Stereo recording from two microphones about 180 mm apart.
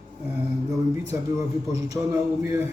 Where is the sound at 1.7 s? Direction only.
15° right (ahead or behind).